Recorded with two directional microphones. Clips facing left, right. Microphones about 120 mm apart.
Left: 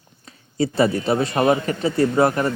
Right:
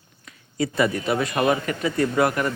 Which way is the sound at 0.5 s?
30° left (ahead or behind).